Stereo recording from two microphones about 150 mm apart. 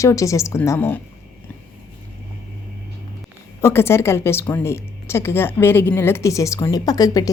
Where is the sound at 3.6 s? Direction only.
15° left (ahead or behind).